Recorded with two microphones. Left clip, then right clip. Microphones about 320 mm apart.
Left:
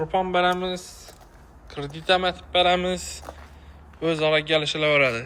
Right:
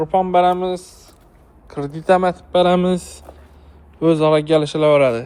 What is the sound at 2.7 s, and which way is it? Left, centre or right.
A man's voice, centre.